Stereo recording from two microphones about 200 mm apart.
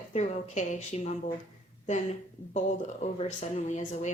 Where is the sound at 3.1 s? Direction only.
35° left (ahead or behind).